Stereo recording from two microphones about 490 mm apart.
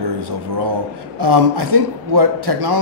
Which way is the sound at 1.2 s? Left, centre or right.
Right.